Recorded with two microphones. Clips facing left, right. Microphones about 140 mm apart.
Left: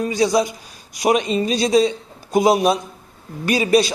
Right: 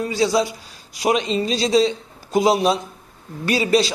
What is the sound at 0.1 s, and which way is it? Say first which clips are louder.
Speech: left 1 dB; 15° left (ahead or behind).